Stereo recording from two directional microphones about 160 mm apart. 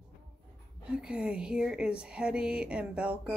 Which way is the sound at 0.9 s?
5° right (ahead or behind).